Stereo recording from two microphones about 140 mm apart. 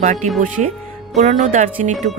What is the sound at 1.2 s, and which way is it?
Speech, 60° right (ahead or behind).